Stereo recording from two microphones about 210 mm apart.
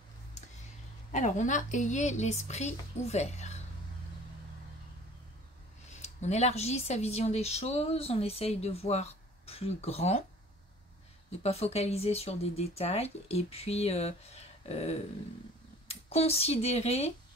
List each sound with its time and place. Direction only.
1.1 s speech: 35° left (ahead or behind)
5.9 s speech: 30° left (ahead or behind)
11.4 s speech: 30° left (ahead or behind)